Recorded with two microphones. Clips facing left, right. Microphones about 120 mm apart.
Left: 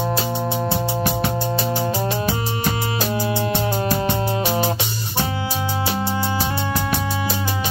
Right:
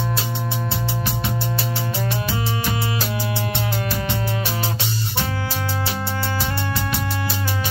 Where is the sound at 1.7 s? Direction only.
25° left (ahead or behind).